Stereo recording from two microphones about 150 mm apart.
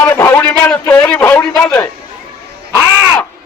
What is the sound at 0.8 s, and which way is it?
A man's voice, 20° left (ahead or behind).